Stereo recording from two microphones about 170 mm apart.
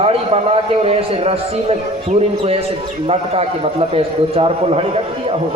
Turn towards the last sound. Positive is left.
turn(degrees=-35)  # may be behind; listen again after turning